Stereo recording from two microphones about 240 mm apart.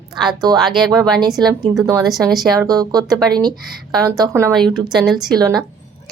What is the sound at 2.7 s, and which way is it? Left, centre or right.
Speech, centre.